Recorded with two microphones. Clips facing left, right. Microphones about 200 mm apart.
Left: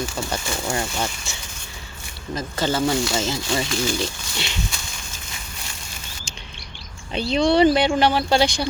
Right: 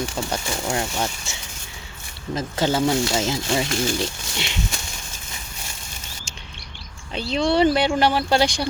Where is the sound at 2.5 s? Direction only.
10° right (ahead or behind).